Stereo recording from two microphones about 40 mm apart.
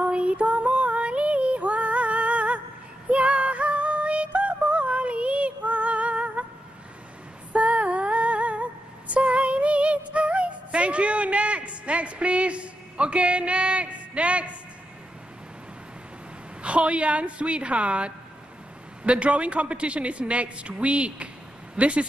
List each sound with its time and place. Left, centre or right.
0.0 s female singing: right
3.1 s synthetic singing: right
7.5 s female singing: right
16.6 s a man's voice: right